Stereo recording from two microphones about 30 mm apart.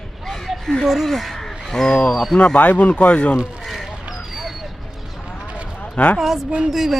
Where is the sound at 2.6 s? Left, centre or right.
Left.